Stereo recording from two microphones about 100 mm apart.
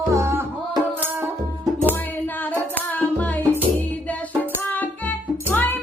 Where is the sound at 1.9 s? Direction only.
20° left (ahead or behind).